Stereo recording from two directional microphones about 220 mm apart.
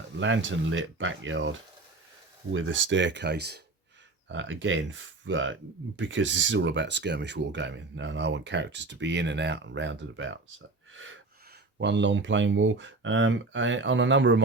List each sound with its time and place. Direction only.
0.2 s speech: 60° right (ahead or behind)
4.3 s speech: 60° right (ahead or behind)
10.9 s gasp: 60° right (ahead or behind)
11.8 s speech: 55° right (ahead or behind)